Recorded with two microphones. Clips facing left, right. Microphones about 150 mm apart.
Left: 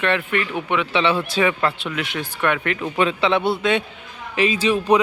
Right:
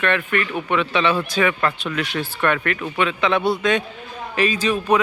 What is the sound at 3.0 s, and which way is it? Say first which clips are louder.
Speech: left 1 dB; 30° left (ahead or behind).